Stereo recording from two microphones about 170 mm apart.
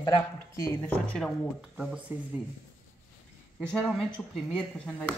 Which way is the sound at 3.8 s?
Centre (ahead or behind).